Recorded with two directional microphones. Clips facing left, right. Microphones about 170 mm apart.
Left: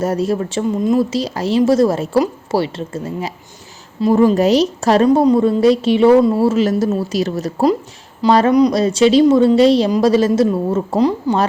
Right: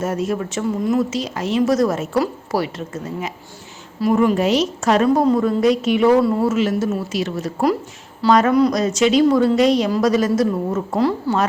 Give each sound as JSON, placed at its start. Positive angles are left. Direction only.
{"t": 0.0, "sound": "a woman's voice", "side_deg": 35}
{"t": 5.0, "sound": "a woman's voice", "side_deg": 20}